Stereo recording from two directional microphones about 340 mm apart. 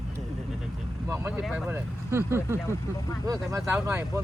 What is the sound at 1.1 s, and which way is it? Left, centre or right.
Speech, centre.